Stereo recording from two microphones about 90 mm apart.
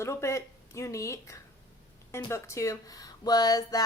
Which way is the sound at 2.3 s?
30° left (ahead or behind).